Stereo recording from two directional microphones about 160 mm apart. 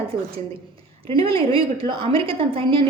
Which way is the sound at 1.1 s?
35° right (ahead or behind).